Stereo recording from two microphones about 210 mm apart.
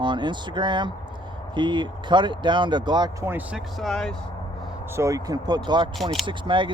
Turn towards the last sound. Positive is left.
turn(degrees=-25)  # may be behind; listen again after turning